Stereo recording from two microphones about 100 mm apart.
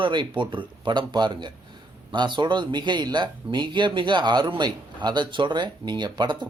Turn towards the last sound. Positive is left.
turn(degrees=-45)  # may be behind; listen again after turning